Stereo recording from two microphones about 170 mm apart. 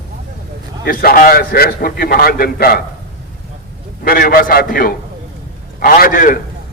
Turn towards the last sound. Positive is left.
turn(degrees=55)  # may be behind; listen again after turning